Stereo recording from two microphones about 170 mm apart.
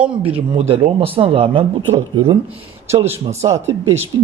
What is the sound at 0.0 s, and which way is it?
Speech, 10° right (ahead or behind).